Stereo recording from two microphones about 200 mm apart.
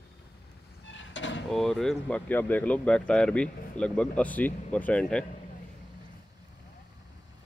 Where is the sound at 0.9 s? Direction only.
65° left (ahead or behind).